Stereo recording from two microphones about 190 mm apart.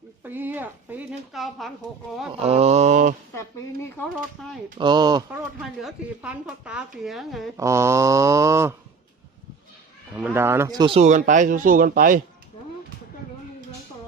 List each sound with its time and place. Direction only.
0.2 s speech: 10° right (ahead or behind)
2.4 s speech: 35° right (ahead or behind)
4.4 s speech: centre (ahead or behind)
4.8 s speech: 20° right (ahead or behind)
5.8 s speech: 5° right (ahead or behind)
7.5 s speech: 15° right (ahead or behind)
10.2 s speech: 10° right (ahead or behind); by 11.0 s 25° right (ahead or behind)
11.0 s speech: 40° right (ahead or behind)